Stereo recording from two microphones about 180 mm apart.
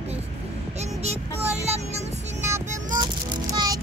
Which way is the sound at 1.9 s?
15° right (ahead or behind).